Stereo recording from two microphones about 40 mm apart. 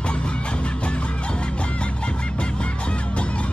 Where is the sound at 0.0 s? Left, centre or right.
Left.